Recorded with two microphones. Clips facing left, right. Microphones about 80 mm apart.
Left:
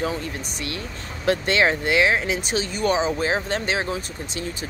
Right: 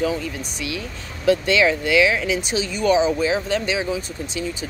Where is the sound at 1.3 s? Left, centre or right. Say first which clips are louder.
Right 3 dB; left.